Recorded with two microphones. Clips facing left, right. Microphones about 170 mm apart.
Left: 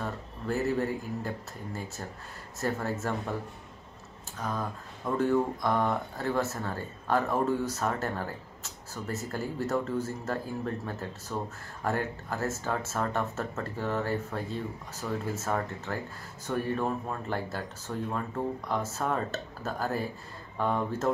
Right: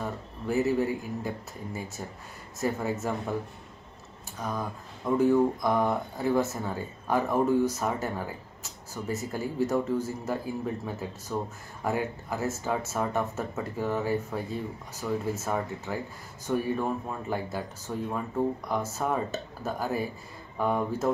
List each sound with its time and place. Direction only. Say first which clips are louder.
0.0 s speech: right 1 dB; 10° right (ahead or behind)
4.4 s speech: right 1 dB; 15° right (ahead or behind)